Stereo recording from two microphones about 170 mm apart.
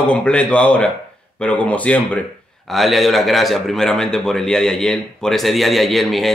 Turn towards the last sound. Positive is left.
turn(degrees=0)  # may be behind; listen again after turning